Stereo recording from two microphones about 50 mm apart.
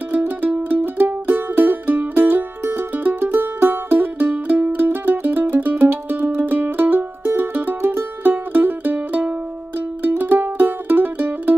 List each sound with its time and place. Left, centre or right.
0.4 s music: right
0.8 s music: right